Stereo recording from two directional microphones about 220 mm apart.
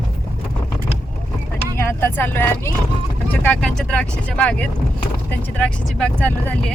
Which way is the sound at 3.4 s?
5° left (ahead or behind).